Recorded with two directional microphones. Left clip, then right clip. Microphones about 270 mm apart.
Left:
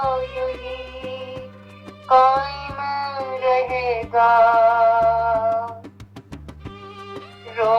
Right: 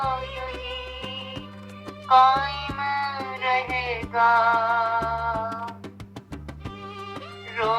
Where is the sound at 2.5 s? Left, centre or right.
Centre.